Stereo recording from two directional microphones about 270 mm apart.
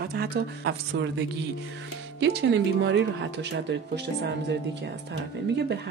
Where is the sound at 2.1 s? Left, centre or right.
Right.